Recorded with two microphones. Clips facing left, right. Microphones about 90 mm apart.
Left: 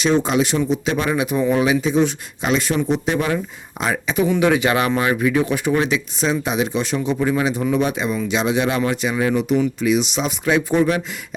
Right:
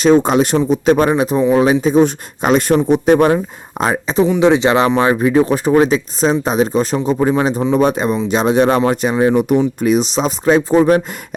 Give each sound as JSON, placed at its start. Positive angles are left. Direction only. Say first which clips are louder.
{"t": 0.0, "sound": "speech", "louder": "right 6 dB", "side_deg": -45}
{"t": 3.9, "sound": "speech", "louder": "right 4 dB", "side_deg": -30}